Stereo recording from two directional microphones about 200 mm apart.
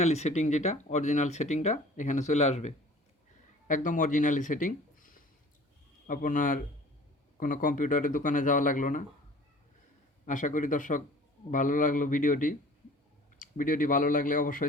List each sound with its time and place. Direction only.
0.0 s speech: 35° left (ahead or behind)
10.2 s speech: 40° left (ahead or behind)